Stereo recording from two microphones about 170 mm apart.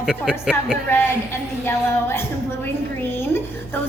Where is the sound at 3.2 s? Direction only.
15° left (ahead or behind).